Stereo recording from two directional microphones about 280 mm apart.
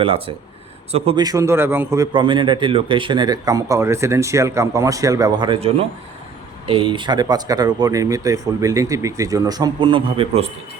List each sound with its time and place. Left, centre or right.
0.0 s a man's voice: centre